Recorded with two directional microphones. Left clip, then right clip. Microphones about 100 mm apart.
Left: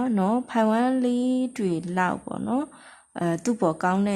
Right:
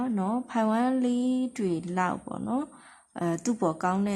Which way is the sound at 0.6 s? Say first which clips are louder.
Left 3 dB; 20° left (ahead or behind).